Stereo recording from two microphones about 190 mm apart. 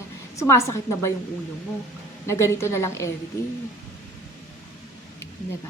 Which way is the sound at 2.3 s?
15° left (ahead or behind).